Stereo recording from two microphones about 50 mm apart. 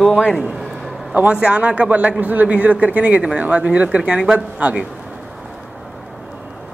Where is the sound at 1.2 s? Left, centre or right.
Right.